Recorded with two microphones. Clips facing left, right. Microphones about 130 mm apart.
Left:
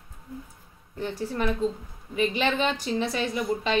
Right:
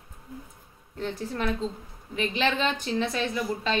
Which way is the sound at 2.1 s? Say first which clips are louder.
Left 2 dB; 10° left (ahead or behind).